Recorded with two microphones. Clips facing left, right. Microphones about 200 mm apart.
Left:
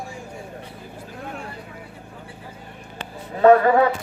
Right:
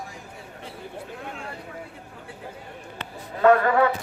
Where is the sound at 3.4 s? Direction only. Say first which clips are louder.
Left 4 dB; 40° left (ahead or behind).